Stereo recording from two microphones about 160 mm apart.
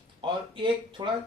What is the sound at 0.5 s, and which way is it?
Speech, 30° right (ahead or behind).